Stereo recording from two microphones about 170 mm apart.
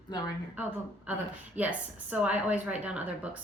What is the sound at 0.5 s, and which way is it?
A woman's voice, 10° right (ahead or behind).